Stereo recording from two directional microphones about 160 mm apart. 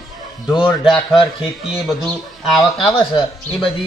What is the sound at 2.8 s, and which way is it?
Speech, 30° left (ahead or behind).